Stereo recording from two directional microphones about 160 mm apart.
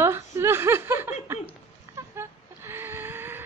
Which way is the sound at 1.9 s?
15° right (ahead or behind).